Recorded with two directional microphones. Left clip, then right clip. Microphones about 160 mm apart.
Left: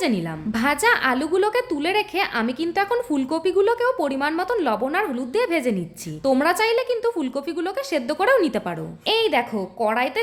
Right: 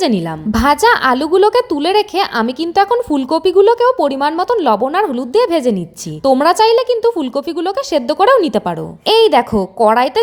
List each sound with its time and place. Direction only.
0.0 s a woman's voice: 35° right (ahead or behind)
9.0 s a woman's voice: 40° right (ahead or behind)